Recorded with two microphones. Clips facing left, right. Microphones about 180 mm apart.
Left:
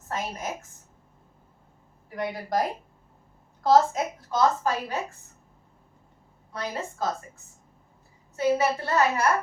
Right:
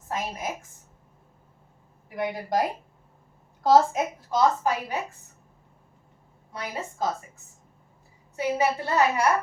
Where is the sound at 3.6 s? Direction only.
15° right (ahead or behind).